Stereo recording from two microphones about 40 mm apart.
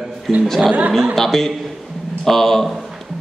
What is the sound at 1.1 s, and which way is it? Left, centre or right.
A man's voice, centre.